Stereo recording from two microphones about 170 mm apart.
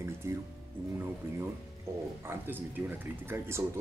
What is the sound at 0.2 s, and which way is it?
Speech, 15° right (ahead or behind).